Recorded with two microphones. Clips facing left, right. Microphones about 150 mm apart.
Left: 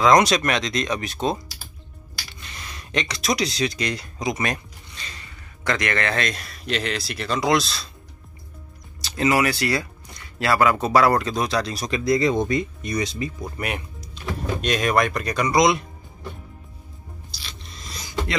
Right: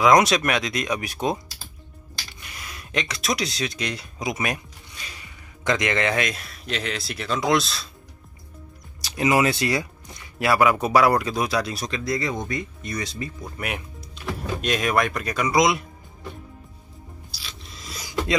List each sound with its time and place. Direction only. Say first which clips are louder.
0.0 s speech: even; 5° right (ahead or behind)
2.4 s speech: left 2 dB; 5° right (ahead or behind)
9.0 s speech: even; 15° right (ahead or behind)
11.9 s speech: left 9 dB; 15° left (ahead or behind)
13.6 s speech: left 1 dB; centre (ahead or behind)
17.3 s a sound: left 1 dB; 5° right (ahead or behind)